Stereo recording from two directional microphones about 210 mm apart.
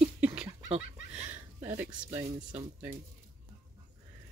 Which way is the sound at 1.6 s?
10° right (ahead or behind).